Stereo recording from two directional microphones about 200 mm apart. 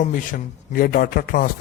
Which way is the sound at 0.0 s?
40° left (ahead or behind).